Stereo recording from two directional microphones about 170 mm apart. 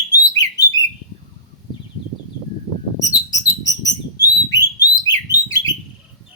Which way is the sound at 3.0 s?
20° left (ahead or behind).